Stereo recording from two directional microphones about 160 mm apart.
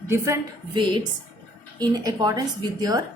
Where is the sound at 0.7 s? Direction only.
30° right (ahead or behind).